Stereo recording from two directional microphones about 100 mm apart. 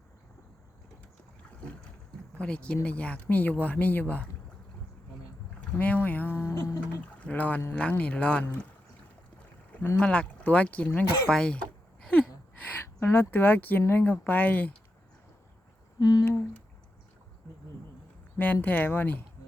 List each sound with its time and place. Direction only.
2.4 s speech: 10° left (ahead or behind)
5.5 s boat: 15° left (ahead or behind)
6.5 s music: 35° left (ahead or behind)
7.3 s speech: 15° left (ahead or behind)
9.7 s speech: 15° left (ahead or behind)
13.0 s speech: 20° left (ahead or behind)
16.0 s humming: 40° left (ahead or behind)
18.3 s speech: 20° left (ahead or behind)